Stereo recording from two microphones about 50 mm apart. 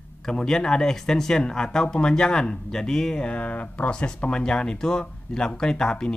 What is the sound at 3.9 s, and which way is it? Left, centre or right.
Speech, centre.